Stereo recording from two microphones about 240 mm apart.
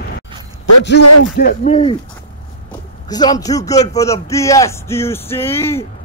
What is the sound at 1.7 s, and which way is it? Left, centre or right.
Speech, left.